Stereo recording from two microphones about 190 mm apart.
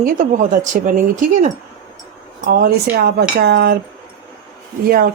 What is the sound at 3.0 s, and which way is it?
Wind chime, 60° right (ahead or behind).